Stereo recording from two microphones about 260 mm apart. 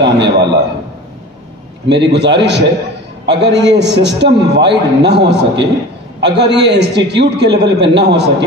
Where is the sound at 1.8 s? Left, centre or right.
Right.